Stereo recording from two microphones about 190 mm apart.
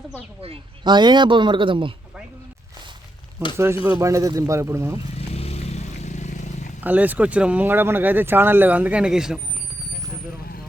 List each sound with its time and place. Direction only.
0.4 s speech: 25° right (ahead or behind)
3.8 s speech: 15° right (ahead or behind)
5.1 s vehicle: 35° left (ahead or behind)
6.8 s speech: 10° right (ahead or behind)